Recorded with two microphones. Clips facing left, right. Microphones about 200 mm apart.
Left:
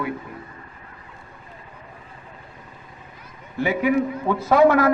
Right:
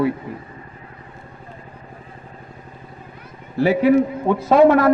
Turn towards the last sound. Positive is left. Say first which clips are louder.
# right 3 dB
turn(degrees=-25)  # may be behind; listen again after turning